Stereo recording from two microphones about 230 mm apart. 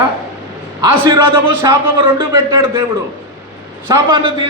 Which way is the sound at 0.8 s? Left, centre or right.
Centre.